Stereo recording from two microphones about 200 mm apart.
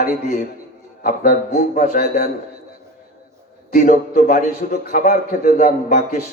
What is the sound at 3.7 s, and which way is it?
A man's voice, 45° left (ahead or behind).